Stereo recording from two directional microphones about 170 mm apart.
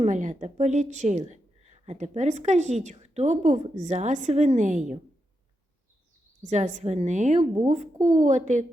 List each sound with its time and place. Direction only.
0.0 s speech: 45° right (ahead or behind)
6.4 s speech: 45° right (ahead or behind)